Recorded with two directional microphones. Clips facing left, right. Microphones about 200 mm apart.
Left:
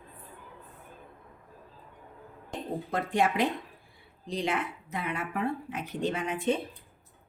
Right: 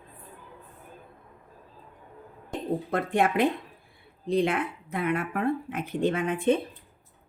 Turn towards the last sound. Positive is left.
turn(degrees=-55)  # may be behind; listen again after turning